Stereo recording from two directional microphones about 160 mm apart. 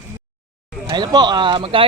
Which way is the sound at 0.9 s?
25° right (ahead or behind).